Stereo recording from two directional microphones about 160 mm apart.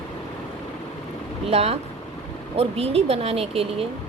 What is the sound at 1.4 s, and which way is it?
Speech, 40° right (ahead or behind).